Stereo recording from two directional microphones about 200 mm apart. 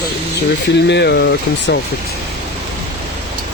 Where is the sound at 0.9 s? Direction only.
55° left (ahead or behind).